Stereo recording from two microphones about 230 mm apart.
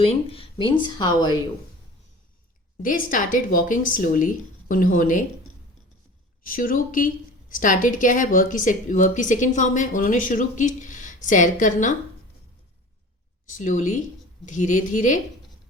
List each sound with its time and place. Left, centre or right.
0.0 s speech: left
2.8 s speech: left
6.4 s speech: left
13.6 s speech: left